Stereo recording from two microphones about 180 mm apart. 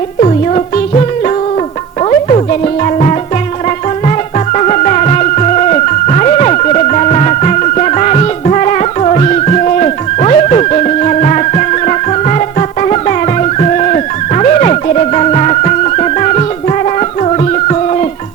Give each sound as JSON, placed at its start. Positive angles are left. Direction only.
{"t": 0.2, "sound": "music", "side_deg": 35}